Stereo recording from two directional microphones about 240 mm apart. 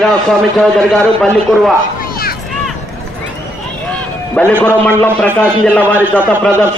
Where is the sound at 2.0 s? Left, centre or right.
Left.